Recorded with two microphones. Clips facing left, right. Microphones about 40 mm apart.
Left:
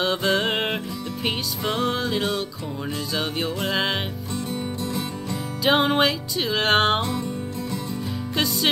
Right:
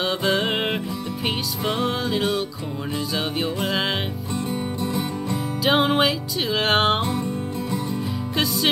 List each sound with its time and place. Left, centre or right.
0.0 s music: centre
5.6 s music: centre
7.0 s music: right